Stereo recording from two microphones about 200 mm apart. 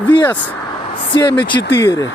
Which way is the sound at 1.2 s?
25° left (ahead or behind).